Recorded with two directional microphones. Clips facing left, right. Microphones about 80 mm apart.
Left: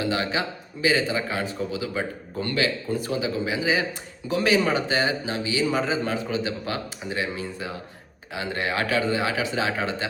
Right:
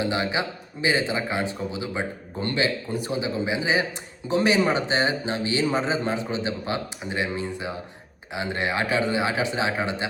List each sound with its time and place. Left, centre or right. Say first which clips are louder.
0.0 s a man's voice: even; right